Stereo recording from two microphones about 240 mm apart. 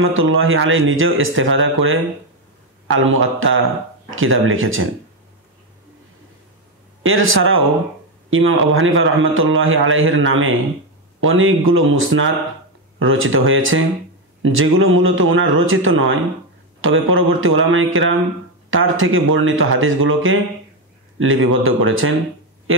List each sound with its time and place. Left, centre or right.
0.0 s a man's voice: right
7.0 s a man's voice: right